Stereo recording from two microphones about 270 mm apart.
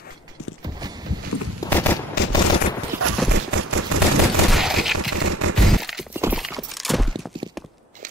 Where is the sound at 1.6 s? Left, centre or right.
Centre.